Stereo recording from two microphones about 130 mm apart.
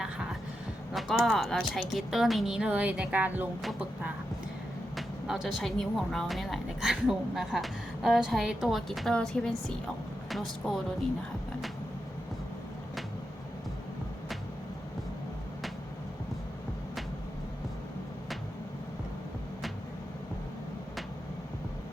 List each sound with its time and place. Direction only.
0.0 s a woman's voice: 5° right (ahead or behind)
4.9 s speech: centre (ahead or behind)